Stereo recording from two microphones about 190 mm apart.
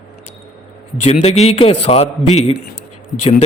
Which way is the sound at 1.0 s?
35° left (ahead or behind).